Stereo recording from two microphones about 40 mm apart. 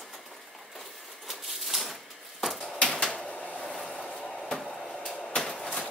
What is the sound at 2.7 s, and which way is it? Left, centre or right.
Typewriter, left.